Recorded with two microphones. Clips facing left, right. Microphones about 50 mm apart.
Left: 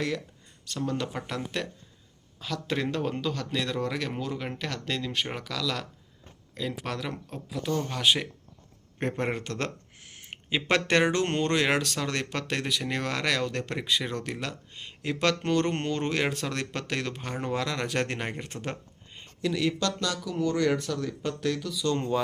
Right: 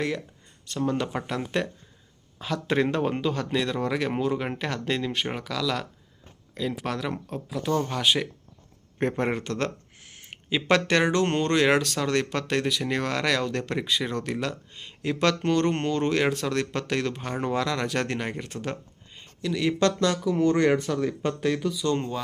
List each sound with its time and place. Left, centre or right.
0.7 s speech: centre
2.4 s a man's voice: right
5.1 s speech: centre
19.5 s speech: centre
19.8 s speech: right
20.9 s a man's voice: right
21.9 s speech: centre